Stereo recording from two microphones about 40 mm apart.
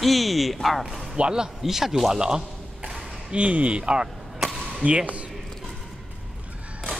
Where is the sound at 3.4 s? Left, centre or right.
Right.